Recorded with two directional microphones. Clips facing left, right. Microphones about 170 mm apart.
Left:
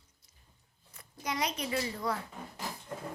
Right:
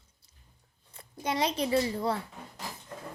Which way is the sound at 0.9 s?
30° right (ahead or behind).